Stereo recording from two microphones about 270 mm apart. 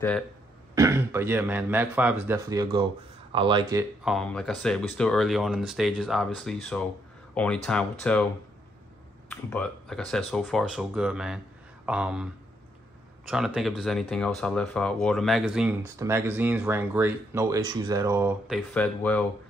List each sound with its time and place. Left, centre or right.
0.7 s speech: centre
4.0 s speech: centre
9.3 s speech: centre
13.3 s speech: centre
18.7 s speech: centre